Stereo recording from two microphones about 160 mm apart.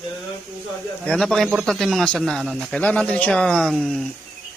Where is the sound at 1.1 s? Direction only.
5° left (ahead or behind).